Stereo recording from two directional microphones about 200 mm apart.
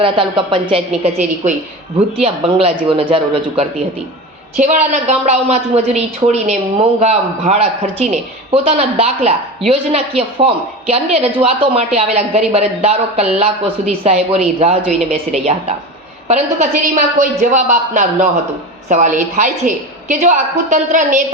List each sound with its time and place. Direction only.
0.0 s a woman's voice: 25° right (ahead or behind)